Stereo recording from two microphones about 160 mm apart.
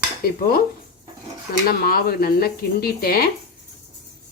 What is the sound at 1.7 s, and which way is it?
Speech, 70° left (ahead or behind).